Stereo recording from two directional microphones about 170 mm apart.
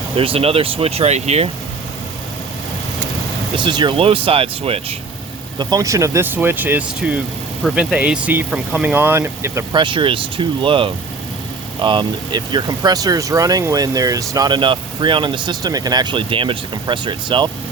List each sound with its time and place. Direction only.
0.2 s speech: 35° right (ahead or behind)
3.6 s speech: 25° right (ahead or behind)
5.5 s speech: 20° right (ahead or behind)
9.7 s speech: 30° right (ahead or behind)